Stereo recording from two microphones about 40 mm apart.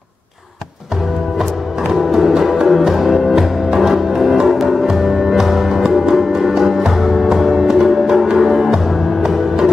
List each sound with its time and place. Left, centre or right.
1.8 s music: centre